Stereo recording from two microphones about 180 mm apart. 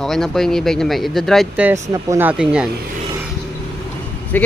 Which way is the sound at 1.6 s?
15° right (ahead or behind).